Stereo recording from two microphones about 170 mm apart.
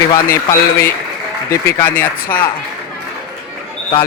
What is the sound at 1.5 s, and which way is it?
Speech, 15° left (ahead or behind).